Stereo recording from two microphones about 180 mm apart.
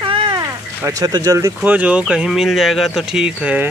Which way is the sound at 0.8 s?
20° right (ahead or behind).